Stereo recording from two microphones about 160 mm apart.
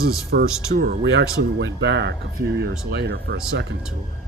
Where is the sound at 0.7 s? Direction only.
65° right (ahead or behind); by 3.8 s 90° right.